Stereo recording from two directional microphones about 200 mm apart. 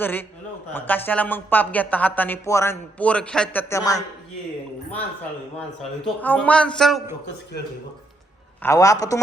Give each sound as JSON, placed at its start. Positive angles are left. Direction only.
{"t": 0.0, "sound": "a man's voice", "side_deg": 10}
{"t": 6.2, "sound": "speech", "side_deg": 5}
{"t": 8.6, "sound": "speech", "side_deg": 15}